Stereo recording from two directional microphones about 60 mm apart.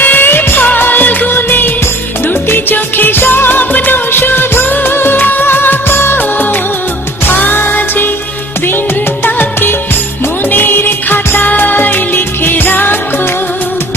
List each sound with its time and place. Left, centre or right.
0.0 s music of bollywood: left
2.2 s music: left
9.2 s music: left